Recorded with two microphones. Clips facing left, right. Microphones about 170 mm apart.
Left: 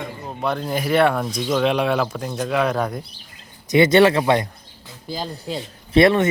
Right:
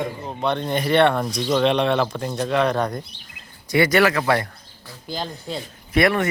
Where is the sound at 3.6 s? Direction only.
20° left (ahead or behind).